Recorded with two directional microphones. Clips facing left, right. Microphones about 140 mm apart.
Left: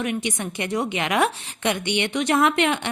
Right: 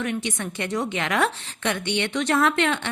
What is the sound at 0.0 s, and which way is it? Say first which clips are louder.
A woman's voice: left 1 dB; 15° left (ahead or behind).